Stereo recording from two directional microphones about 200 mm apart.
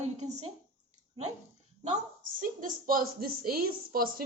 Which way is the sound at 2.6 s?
45° right (ahead or behind).